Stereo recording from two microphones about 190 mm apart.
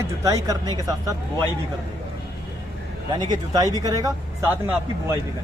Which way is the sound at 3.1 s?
20° right (ahead or behind).